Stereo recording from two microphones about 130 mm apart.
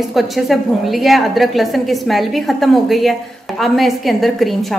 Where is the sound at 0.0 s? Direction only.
Centre (ahead or behind).